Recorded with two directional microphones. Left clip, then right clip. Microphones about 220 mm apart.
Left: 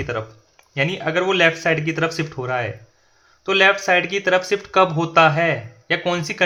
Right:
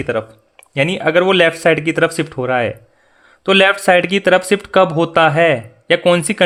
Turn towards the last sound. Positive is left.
turn(degrees=-40)  # may be behind; listen again after turning